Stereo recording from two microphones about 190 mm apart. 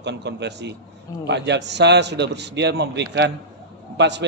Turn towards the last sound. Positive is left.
turn(degrees=-65)  # may be behind; listen again after turning